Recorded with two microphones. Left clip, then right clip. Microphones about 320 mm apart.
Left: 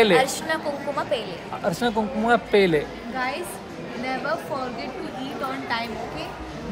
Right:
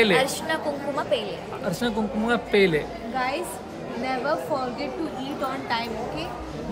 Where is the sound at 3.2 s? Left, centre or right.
Centre.